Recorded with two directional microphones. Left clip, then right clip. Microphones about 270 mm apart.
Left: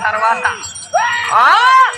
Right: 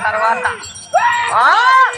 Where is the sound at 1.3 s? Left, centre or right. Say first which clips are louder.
Left 3 dB; left.